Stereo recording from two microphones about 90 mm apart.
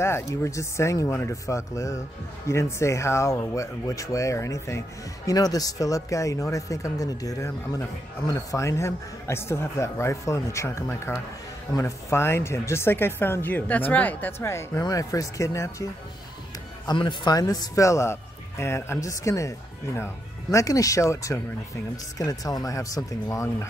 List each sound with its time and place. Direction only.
0.0 s speech: 35° left (ahead or behind)
14.4 s speech: 30° left (ahead or behind)
16.8 s speech: 60° left (ahead or behind); by 19.5 s 35° left (ahead or behind)
20.5 s speech: 40° left (ahead or behind)